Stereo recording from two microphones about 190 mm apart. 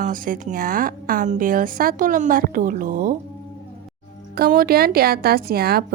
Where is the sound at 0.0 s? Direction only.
45° right (ahead or behind).